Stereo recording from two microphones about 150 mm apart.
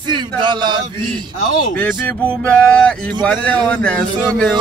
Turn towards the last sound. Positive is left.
turn(degrees=5)  # may be behind; listen again after turning